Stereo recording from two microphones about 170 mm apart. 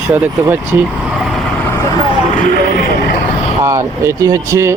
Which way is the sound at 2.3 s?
60° left (ahead or behind).